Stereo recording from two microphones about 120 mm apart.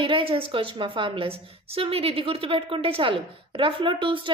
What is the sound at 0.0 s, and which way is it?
A woman's voice, 50° right (ahead or behind).